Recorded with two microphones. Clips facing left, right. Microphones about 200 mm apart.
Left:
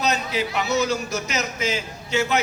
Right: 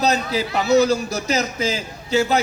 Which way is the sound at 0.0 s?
35° right (ahead or behind).